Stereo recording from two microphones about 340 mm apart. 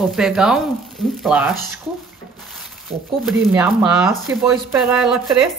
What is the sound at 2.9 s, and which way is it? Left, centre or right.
Speech, centre.